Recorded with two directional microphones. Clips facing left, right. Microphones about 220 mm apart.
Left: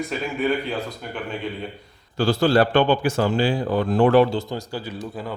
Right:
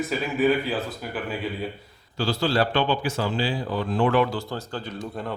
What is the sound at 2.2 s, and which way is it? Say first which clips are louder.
Speech: left 5 dB; 50° left (ahead or behind).